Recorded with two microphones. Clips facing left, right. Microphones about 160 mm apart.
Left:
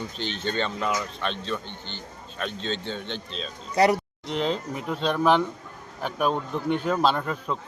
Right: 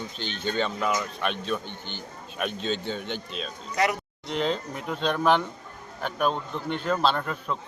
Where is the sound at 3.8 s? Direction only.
30° left (ahead or behind).